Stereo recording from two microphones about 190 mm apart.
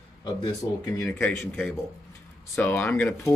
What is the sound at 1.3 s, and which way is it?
Speech, 5° left (ahead or behind).